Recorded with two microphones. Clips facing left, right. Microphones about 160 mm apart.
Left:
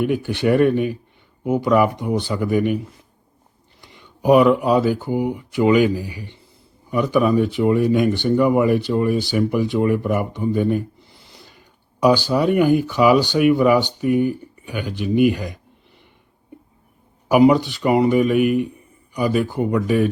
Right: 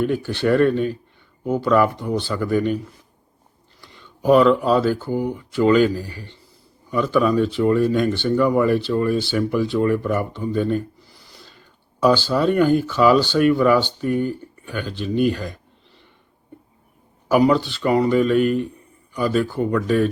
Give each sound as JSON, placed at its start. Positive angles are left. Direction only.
{"t": 0.0, "sound": "speech", "side_deg": 15}
{"t": 17.2, "sound": "speech", "side_deg": 15}